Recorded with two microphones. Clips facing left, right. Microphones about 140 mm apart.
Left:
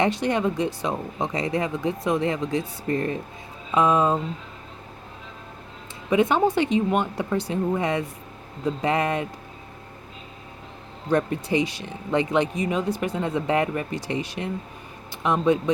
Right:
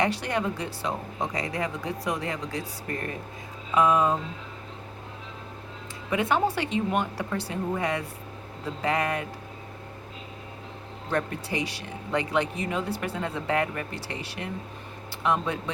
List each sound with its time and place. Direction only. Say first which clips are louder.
0.0 s speech: left 4 dB; 20° left (ahead or behind)
6.1 s speech: left 5 dB; 20° left (ahead or behind)
11.1 s speech: left 7 dB; 20° left (ahead or behind)